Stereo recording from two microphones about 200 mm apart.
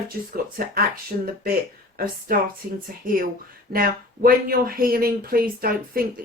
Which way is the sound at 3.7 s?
45° right (ahead or behind).